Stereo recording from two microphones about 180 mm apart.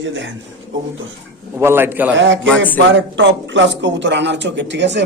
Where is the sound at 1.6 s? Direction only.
15° right (ahead or behind).